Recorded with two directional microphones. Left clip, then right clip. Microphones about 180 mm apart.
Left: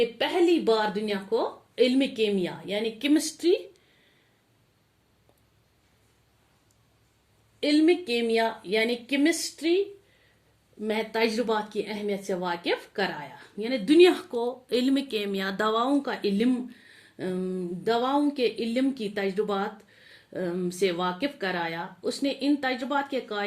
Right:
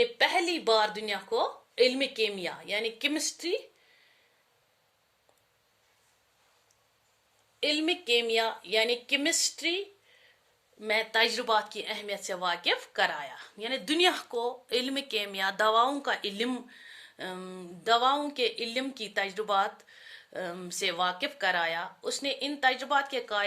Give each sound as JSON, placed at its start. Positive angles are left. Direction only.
{"t": 0.0, "sound": "a woman's voice", "side_deg": -40}
{"t": 3.1, "sound": "speech", "side_deg": -20}
{"t": 7.6, "sound": "a woman's voice", "side_deg": -25}